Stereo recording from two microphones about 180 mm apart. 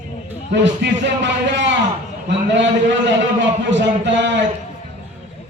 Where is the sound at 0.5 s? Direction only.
80° right.